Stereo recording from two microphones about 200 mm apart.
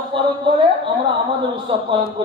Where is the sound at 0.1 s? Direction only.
25° right (ahead or behind).